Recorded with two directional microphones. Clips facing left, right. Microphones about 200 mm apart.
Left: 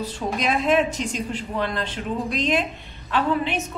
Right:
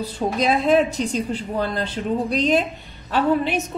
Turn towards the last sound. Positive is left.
turn(degrees=-40)  # may be behind; listen again after turning